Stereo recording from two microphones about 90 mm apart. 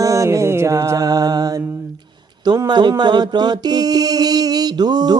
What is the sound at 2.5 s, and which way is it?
Music, 55° right (ahead or behind).